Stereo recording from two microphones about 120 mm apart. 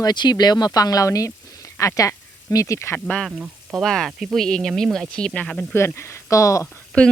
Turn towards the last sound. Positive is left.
turn(degrees=10)  # may be behind; listen again after turning